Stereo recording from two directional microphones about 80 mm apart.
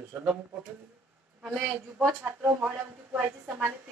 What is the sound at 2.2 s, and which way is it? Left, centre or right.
Speech, right.